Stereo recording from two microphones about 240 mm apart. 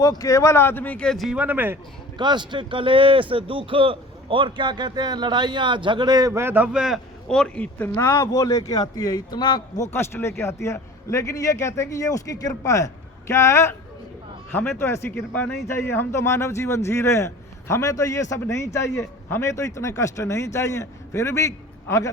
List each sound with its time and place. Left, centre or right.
0.0 s a man's voice: centre
2.1 s speech: centre
9.6 s speech: left
9.9 s a man's voice: centre